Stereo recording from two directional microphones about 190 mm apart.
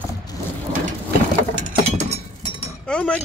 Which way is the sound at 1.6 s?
45° right (ahead or behind).